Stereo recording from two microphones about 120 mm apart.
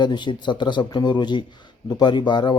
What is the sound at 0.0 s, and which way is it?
Speech, 40° left (ahead or behind).